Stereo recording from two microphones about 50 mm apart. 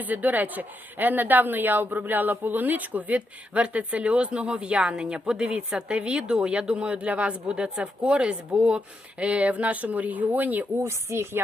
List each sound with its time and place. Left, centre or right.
0.0 s speech: right
10.8 s speech: right